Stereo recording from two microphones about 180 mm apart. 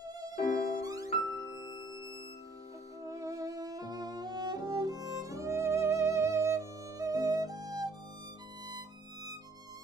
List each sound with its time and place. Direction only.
0.0 s violin: 20° right (ahead or behind)
0.8 s music: 20° right (ahead or behind)
3.0 s music: 20° right (ahead or behind)
8.6 s violin: 20° right (ahead or behind)